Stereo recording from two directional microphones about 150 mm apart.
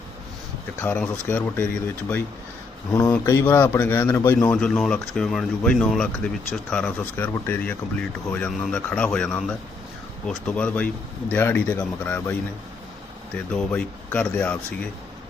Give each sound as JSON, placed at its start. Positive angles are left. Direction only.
{"t": 0.8, "sound": "speech", "side_deg": 15}
{"t": 4.4, "sound": "speech", "side_deg": 5}